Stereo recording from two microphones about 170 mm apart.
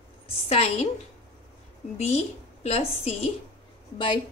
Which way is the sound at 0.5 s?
35° left (ahead or behind).